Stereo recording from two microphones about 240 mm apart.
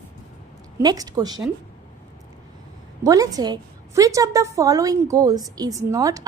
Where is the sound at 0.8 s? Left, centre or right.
Centre.